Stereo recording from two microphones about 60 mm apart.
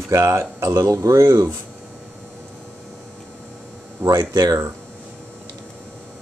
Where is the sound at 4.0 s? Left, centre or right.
Right.